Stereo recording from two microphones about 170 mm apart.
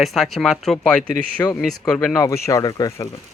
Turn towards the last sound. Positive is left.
turn(degrees=20)  # may be behind; listen again after turning